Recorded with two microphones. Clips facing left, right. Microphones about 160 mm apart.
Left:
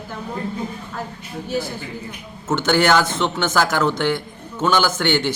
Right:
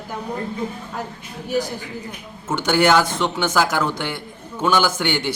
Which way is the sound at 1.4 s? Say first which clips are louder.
Right 2 dB; 15° right (ahead or behind).